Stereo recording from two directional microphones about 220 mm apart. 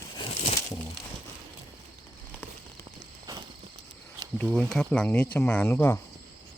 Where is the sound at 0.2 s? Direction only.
25° left (ahead or behind).